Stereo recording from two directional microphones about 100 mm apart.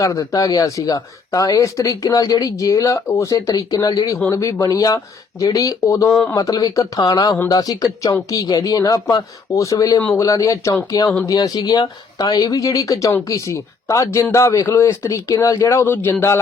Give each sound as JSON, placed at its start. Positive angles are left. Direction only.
{"t": 0.0, "sound": "speech", "side_deg": 35}